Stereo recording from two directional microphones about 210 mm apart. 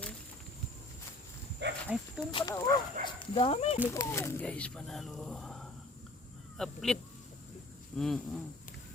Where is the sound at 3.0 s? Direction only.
40° right (ahead or behind).